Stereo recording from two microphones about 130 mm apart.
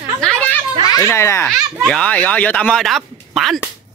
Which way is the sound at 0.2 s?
5° left (ahead or behind).